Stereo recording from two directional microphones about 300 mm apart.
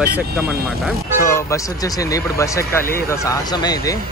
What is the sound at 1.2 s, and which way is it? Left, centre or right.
Speech, centre.